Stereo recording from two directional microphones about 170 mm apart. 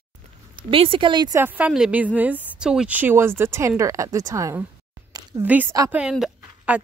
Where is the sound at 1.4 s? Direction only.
10° right (ahead or behind).